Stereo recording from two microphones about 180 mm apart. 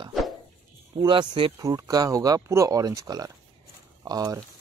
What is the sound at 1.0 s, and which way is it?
Speech, 25° right (ahead or behind).